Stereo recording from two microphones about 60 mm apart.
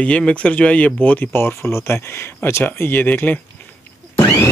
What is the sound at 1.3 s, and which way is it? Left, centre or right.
Speech, left.